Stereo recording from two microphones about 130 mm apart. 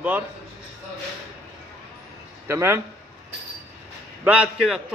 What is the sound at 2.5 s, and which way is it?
Speech, 20° right (ahead or behind).